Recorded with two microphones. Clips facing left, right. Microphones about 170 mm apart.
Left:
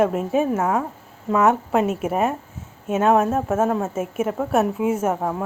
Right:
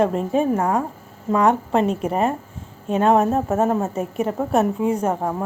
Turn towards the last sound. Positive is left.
turn(degrees=0)  # may be behind; listen again after turning